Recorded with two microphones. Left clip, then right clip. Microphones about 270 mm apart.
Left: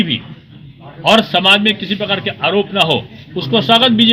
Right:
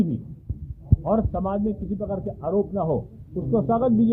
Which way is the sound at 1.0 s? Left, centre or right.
Left.